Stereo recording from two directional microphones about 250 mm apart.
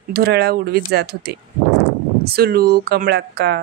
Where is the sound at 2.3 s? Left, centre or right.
Right.